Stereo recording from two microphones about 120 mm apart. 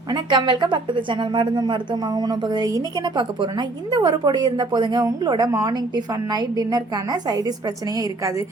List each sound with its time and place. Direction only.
0.1 s a woman's voice: 40° right (ahead or behind)